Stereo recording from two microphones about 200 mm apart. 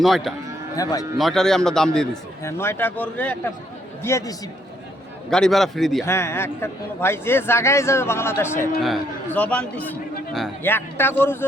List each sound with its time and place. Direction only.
0.0 s a man's voice: centre (ahead or behind)
0.8 s a man's voice: 15° left (ahead or behind)
1.2 s a man's voice: centre (ahead or behind)
2.4 s a man's voice: 10° left (ahead or behind)
5.3 s a man's voice: centre (ahead or behind)
6.1 s a man's voice: 10° left (ahead or behind)